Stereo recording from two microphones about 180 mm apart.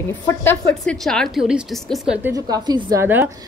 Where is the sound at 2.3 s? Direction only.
20° right (ahead or behind).